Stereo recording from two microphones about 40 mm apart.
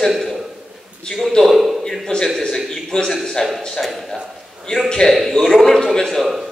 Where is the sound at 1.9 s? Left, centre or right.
Centre.